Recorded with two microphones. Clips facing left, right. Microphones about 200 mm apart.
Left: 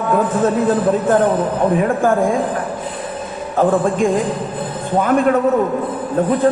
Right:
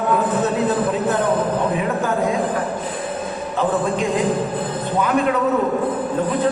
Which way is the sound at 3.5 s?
45° left (ahead or behind).